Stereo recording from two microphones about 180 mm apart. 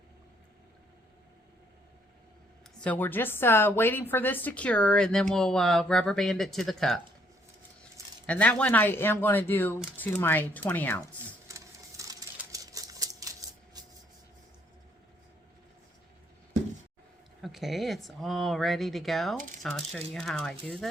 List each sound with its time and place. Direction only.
2.8 s a woman's voice: 10° left (ahead or behind)
8.3 s speech: 5° left (ahead or behind)
11.4 s typewriter: 15° right (ahead or behind)
13.8 s vehicle: 20° right (ahead or behind)
17.4 s a woman's voice: centre (ahead or behind)